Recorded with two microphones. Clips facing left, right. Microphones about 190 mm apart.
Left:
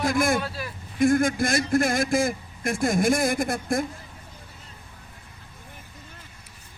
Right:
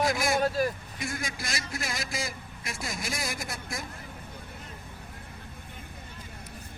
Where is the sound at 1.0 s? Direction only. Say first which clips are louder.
Left 17 dB; 55° left (ahead or behind).